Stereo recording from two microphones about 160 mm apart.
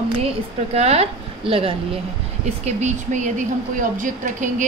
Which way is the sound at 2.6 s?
50° right (ahead or behind).